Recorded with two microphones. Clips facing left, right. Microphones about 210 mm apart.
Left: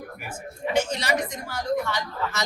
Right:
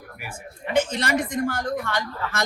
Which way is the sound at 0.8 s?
50° right (ahead or behind).